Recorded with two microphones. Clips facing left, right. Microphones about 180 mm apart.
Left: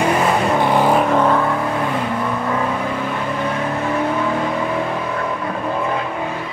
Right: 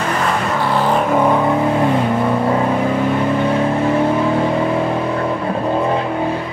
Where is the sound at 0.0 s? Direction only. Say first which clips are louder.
Left 3 dB; 15° left (ahead or behind).